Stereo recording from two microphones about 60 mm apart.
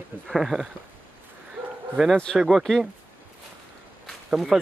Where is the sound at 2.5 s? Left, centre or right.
Centre.